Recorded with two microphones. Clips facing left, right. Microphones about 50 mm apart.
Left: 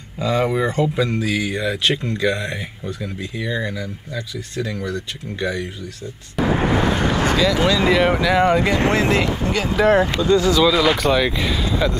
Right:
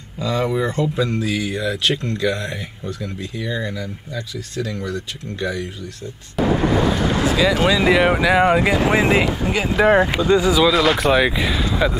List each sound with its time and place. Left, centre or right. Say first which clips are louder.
0.2 s speech: left 1 dB; centre
6.5 s vehicle: right 1 dB; left
7.0 s a sound: even; left
7.6 s speech: right 2 dB; centre